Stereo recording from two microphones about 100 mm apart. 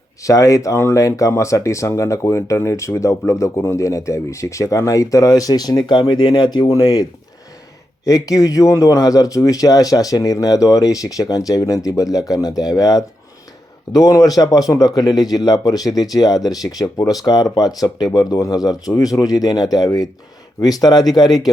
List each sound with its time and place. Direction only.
0.2 s speech: 30° left (ahead or behind)